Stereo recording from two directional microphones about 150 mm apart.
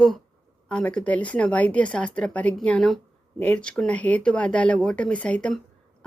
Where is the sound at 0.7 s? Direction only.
5° left (ahead or behind).